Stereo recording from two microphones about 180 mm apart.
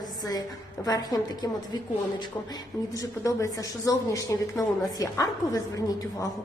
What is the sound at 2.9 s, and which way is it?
A woman's voice, 20° left (ahead or behind).